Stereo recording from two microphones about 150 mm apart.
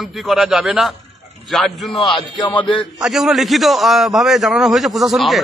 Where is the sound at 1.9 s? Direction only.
30° left (ahead or behind).